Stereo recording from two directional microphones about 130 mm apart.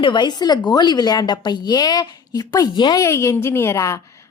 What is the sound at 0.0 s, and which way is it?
A woman's voice, 35° left (ahead or behind).